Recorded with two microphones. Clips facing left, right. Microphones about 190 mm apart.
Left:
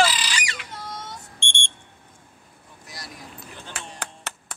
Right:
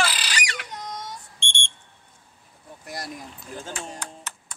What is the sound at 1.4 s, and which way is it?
Smoke detector, 55° left (ahead or behind).